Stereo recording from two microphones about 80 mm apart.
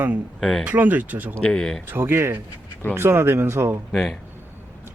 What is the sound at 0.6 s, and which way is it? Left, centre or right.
Speech, right.